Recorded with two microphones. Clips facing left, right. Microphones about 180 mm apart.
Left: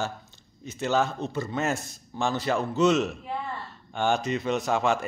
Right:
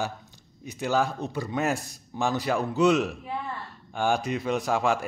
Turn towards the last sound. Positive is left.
turn(degrees=-10)  # may be behind; listen again after turning